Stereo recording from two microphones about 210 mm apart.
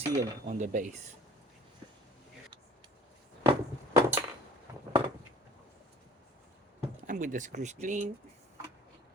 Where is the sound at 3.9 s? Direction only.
10° right (ahead or behind).